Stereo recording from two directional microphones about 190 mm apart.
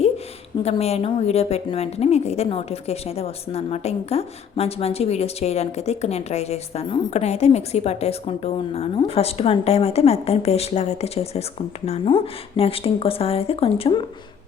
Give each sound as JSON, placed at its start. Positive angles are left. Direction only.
{"t": 0.6, "sound": "a woman's voice", "side_deg": 35}